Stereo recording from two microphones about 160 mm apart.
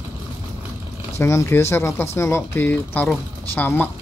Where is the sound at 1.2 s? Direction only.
20° left (ahead or behind).